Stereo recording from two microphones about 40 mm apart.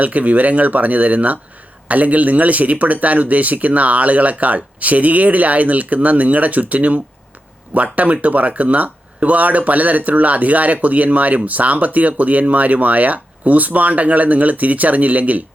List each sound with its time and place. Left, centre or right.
0.0 s speech: right